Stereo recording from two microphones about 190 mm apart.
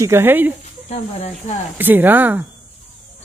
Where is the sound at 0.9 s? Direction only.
35° left (ahead or behind).